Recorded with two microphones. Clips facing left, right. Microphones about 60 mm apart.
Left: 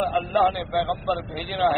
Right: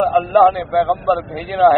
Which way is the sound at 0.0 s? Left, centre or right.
Right.